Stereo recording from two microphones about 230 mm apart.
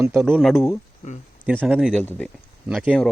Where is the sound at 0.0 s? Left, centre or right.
Centre.